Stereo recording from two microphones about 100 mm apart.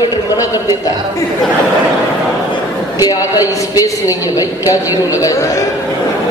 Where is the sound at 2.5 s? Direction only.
40° left (ahead or behind).